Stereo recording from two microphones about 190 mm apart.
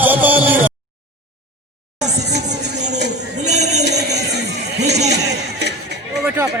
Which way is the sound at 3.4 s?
35° right (ahead or behind).